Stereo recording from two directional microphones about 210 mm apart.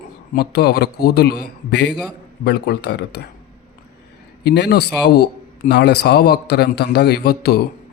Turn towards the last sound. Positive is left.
turn(degrees=50)  # may be behind; listen again after turning